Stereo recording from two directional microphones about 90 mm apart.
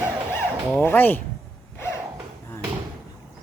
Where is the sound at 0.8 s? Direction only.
25° left (ahead or behind).